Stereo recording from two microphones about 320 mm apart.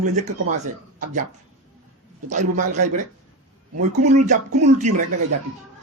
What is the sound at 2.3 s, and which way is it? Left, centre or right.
Speech, right.